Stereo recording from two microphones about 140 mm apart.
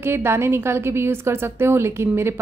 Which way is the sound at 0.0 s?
15° right (ahead or behind).